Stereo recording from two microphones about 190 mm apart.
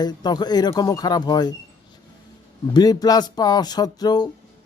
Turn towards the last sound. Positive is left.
turn(degrees=20)  # may be behind; listen again after turning